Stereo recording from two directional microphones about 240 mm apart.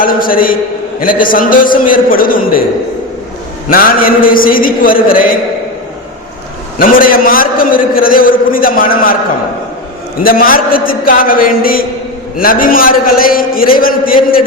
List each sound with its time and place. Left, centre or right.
0.0 s a man's voice: left
3.7 s a man's voice: left
6.7 s a man's voice: left
10.2 s a man's voice: left